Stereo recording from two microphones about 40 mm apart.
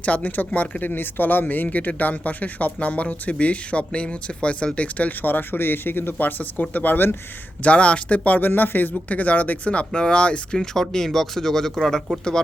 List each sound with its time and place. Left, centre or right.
0.0 s speech: left
1.6 s speech: left
7.6 s speech: left
8.4 s speech: left
9.0 s speech: left
10.8 s speech: centre